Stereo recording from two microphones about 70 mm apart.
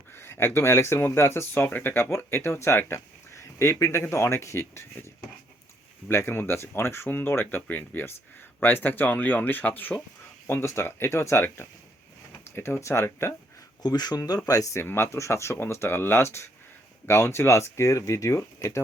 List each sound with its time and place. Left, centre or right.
0.1 s speech: left
6.1 s speech: left
13.8 s speech: left
14.2 s speech: left
14.8 s speech: left